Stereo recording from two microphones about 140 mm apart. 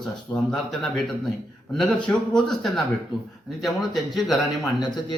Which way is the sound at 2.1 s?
5° left (ahead or behind).